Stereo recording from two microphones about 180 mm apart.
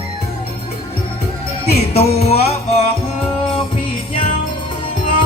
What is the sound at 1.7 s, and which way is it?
Music, 35° left (ahead or behind).